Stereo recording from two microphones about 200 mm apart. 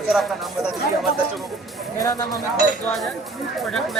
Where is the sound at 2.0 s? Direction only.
20° left (ahead or behind).